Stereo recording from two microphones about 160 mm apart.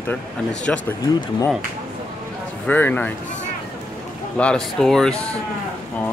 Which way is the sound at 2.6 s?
10° left (ahead or behind).